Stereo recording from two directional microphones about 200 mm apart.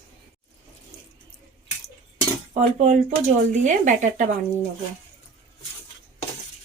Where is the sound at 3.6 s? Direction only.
40° right (ahead or behind).